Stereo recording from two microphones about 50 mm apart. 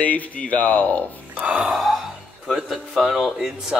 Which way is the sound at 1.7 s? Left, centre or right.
Centre.